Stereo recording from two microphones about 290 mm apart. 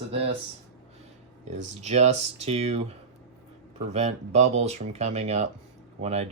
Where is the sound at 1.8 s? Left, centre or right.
Right.